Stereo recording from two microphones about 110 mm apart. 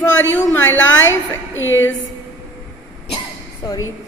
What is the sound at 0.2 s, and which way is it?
A woman's voice, 20° left (ahead or behind).